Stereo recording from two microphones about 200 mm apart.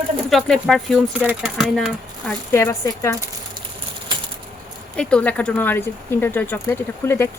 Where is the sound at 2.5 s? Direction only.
15° left (ahead or behind).